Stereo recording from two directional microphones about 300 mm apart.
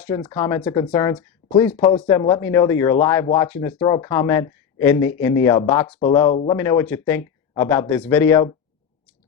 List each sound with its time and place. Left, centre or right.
0.0 s speech: centre
6.0 s speech: centre
6.6 s speech: centre